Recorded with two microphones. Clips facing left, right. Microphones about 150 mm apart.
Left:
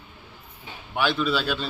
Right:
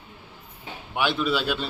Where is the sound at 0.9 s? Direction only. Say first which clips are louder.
Left 1 dB; 15° right (ahead or behind).